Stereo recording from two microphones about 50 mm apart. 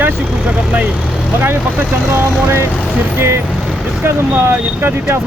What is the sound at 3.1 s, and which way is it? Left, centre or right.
Speech, right.